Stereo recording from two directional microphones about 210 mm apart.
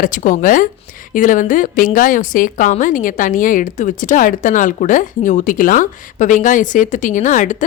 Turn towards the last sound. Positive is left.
turn(degrees=35)  # may be behind; listen again after turning